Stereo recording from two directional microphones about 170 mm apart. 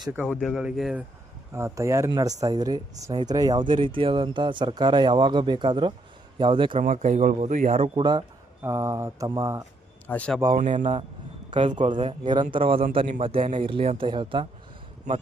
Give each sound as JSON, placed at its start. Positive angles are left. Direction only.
{"t": 0.3, "sound": "speech", "side_deg": 0}
{"t": 1.5, "sound": "speech", "side_deg": -15}
{"t": 6.8, "sound": "speech", "side_deg": -45}
{"t": 8.6, "sound": "mantra", "side_deg": -15}
{"t": 10.1, "sound": "speech", "side_deg": 5}
{"t": 10.6, "sound": "speech", "side_deg": -45}
{"t": 11.5, "sound": "speech", "side_deg": -30}